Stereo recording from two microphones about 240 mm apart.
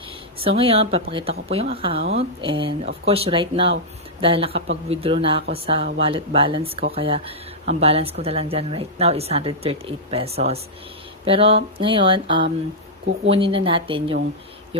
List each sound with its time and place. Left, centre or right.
0.3 s speech: right